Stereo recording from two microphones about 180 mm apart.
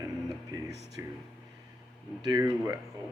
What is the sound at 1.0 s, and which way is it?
Speech, 15° right (ahead or behind).